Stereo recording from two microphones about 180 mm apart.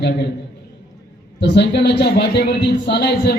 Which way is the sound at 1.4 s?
70° left (ahead or behind).